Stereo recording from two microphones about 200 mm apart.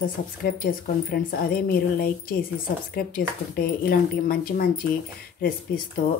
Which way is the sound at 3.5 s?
50° left (ahead or behind).